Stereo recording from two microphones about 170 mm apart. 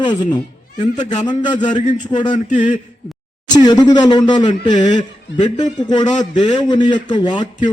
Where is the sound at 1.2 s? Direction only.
25° left (ahead or behind).